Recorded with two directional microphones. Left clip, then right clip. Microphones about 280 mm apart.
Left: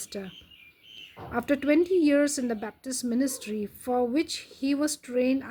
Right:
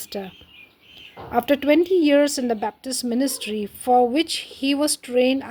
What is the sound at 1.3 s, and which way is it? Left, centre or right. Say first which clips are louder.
A woman's voice: right 7 dB; centre.